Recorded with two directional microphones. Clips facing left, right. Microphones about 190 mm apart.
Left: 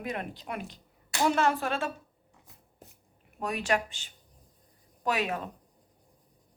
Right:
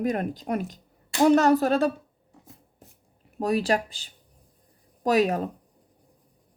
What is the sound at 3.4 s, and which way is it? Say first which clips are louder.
Speech: right 6 dB; 35° right (ahead or behind).